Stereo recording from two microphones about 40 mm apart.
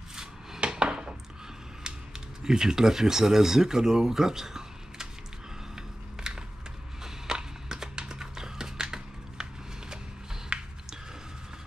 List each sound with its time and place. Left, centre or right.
0.1 s dishes: centre
0.6 s dishes: right
1.8 s speech: centre
5.8 s a sound: centre
8.0 s typing: centre
10.5 s a sound: right